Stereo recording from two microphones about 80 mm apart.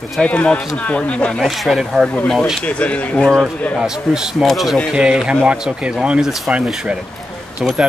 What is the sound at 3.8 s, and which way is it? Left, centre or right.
Speech, centre.